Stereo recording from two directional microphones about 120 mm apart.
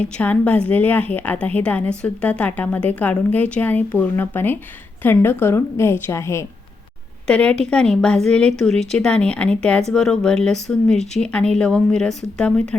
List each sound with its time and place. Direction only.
0.0 s a woman's voice: 10° left (ahead or behind)
7.3 s a woman's voice: 10° left (ahead or behind)